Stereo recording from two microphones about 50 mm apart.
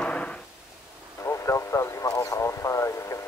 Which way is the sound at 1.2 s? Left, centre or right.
Left.